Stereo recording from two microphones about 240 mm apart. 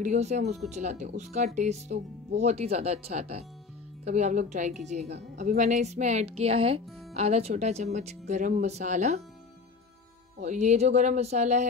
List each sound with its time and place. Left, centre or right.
0.0 s speech: right
10.4 s speech: right